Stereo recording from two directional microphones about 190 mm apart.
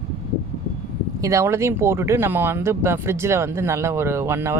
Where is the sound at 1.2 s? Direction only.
15° right (ahead or behind).